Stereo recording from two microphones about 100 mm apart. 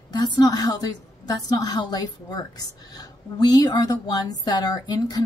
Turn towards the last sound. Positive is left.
turn(degrees=40)  # may be behind; listen again after turning